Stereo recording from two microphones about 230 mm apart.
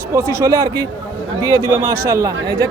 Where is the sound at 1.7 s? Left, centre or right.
Centre.